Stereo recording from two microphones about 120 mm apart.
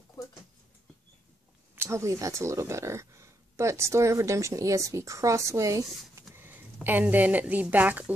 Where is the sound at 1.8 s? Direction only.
25° right (ahead or behind).